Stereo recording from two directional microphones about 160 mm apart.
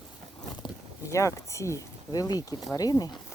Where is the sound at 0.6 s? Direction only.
20° left (ahead or behind).